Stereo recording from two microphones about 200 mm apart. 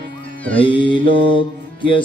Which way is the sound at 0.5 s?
25° left (ahead or behind).